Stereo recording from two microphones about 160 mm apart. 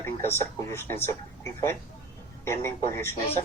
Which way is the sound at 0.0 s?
15° left (ahead or behind).